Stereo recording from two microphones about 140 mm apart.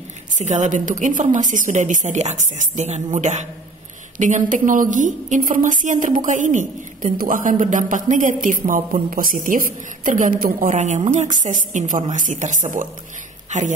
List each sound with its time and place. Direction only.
0.3 s a woman's voice: 60° right (ahead or behind)